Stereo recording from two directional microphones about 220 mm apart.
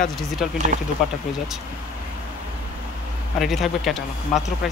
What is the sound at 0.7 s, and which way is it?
Speech, 35° right (ahead or behind).